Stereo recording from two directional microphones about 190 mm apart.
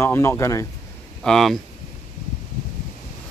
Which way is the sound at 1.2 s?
Centre (ahead or behind).